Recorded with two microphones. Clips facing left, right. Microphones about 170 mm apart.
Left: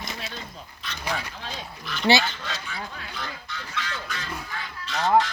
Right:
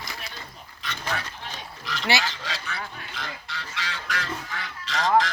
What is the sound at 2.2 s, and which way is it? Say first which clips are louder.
Duck: even; 90° right.